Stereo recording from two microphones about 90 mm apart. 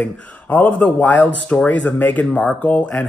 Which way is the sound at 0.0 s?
15° left (ahead or behind).